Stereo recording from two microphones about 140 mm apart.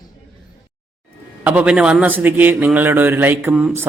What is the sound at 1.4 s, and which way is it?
A man's voice, 10° right (ahead or behind).